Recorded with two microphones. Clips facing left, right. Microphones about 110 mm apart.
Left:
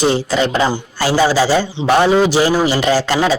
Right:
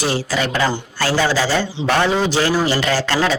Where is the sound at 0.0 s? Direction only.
20° left (ahead or behind).